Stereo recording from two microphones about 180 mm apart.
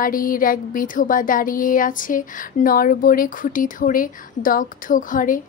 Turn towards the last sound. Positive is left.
turn(degrees=50)  # may be behind; listen again after turning